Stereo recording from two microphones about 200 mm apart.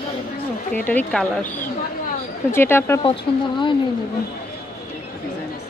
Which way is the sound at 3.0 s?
25° left (ahead or behind).